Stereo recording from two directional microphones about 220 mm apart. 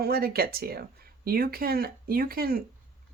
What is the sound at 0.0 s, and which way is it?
Speech, 45° right (ahead or behind).